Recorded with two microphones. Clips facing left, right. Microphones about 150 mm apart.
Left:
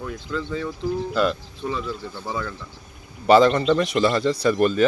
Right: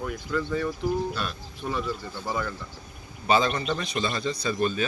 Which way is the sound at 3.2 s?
85° left.